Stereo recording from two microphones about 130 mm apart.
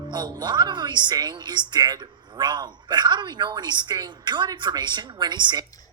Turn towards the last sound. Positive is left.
turn(degrees=-35)  # may be behind; listen again after turning